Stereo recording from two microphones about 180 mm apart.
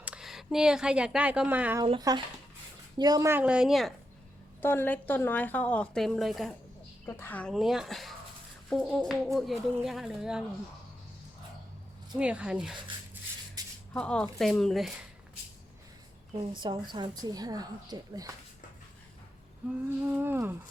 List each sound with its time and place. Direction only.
0.0 s speech: 5° right (ahead or behind)
1.8 s a woman's voice: 20° right (ahead or behind); by 3.9 s centre (ahead or behind)
4.6 s a woman's voice: 10° left (ahead or behind)
7.0 s speech: 10° left (ahead or behind)
12.1 s speech: 5° right (ahead or behind)
13.9 s speech: 5° left (ahead or behind)
16.5 s a woman's voice: 25° right (ahead or behind)
20.1 s a woman's voice: 10° right (ahead or behind)